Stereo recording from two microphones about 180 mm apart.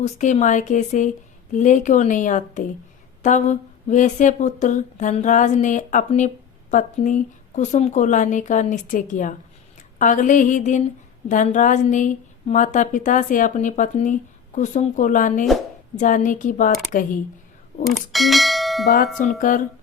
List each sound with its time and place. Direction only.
0.0 s speech: 40° left (ahead or behind)
17.8 s speech: centre (ahead or behind)
19.4 s speech: 45° left (ahead or behind)